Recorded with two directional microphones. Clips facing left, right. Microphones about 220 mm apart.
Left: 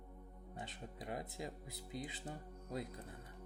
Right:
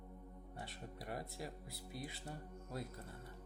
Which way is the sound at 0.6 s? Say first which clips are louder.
Left 2 dB; 20° left (ahead or behind).